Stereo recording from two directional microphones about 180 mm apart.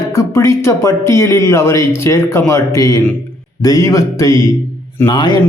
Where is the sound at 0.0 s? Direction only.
15° left (ahead or behind).